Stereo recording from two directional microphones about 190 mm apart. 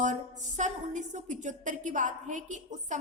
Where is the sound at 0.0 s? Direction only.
40° right (ahead or behind).